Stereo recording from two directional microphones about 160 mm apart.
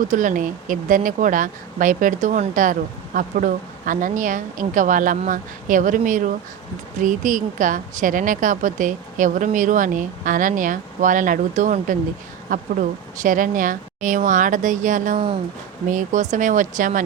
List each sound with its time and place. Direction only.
0.0 s a woman's voice: 55° right (ahead or behind)